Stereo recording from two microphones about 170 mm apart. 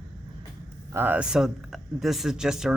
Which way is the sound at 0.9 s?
10° right (ahead or behind).